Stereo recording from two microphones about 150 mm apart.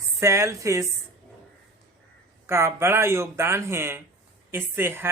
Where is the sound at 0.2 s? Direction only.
20° right (ahead or behind).